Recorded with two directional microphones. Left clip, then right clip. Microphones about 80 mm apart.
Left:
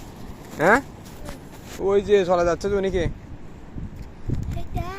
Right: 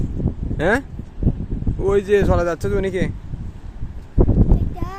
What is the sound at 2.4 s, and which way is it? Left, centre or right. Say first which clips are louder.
Speech: right 1 dB; right.